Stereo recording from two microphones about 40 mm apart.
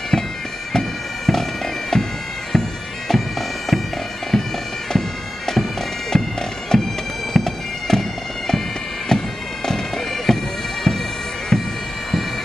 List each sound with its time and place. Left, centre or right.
0.1 s bagpipes: centre
6.1 s bagpipes: centre
9.1 s bagpipes: centre